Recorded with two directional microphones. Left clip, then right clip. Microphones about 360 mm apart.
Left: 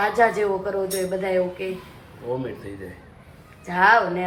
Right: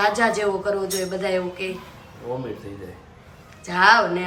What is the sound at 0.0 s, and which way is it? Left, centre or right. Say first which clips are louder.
Speech: even; centre.